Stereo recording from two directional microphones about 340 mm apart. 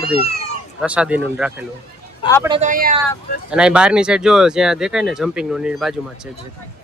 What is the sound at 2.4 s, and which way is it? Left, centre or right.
Speech, centre.